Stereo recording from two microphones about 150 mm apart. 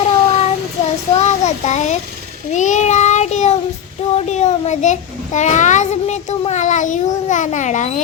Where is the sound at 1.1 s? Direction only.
50° left (ahead or behind).